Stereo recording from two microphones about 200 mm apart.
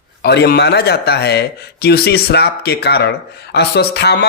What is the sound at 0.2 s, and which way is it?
A man's voice, 55° left (ahead or behind).